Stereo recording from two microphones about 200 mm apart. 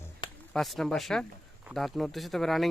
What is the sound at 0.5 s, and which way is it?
Speech, centre (ahead or behind).